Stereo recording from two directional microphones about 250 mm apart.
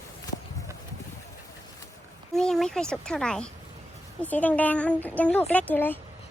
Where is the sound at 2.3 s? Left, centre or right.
Centre.